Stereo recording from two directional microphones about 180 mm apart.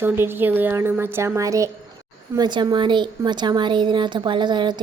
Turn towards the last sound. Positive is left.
turn(degrees=-25)  # may be behind; listen again after turning